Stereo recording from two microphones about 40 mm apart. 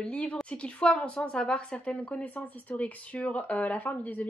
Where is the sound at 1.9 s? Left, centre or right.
Left.